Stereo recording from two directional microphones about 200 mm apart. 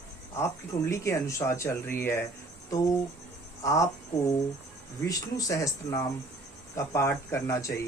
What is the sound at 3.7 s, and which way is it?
Speech, 15° left (ahead or behind).